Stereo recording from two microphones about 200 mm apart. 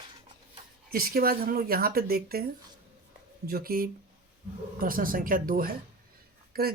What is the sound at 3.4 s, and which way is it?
Speech, 50° right (ahead or behind).